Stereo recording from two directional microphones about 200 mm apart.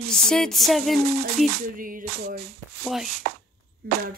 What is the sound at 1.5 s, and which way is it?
Music, 45° right (ahead or behind).